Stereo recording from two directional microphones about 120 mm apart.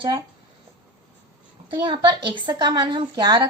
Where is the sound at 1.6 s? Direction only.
40° right (ahead or behind).